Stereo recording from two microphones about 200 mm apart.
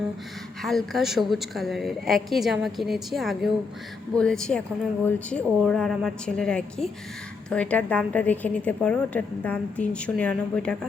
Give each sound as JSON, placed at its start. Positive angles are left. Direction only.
{"t": 0.6, "sound": "a woman's voice", "side_deg": 0}